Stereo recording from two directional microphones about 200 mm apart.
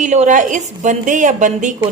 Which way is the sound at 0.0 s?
35° right (ahead or behind).